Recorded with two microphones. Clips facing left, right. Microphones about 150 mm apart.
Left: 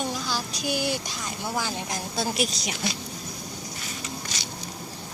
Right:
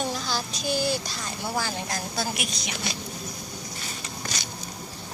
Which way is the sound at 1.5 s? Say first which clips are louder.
Right 1 dB; 20° left (ahead or behind).